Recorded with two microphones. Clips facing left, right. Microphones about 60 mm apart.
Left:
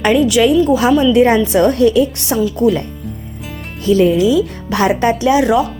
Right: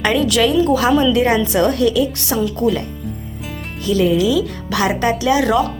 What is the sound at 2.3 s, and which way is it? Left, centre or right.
Speech, centre.